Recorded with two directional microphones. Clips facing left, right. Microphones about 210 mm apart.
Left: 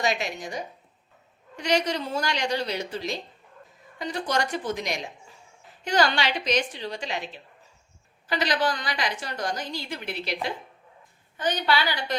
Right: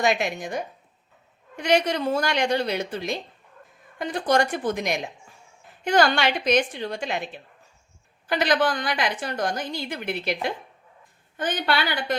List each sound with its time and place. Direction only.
0.0 s a woman's voice: 55° right (ahead or behind)
8.3 s a woman's voice: 55° right (ahead or behind)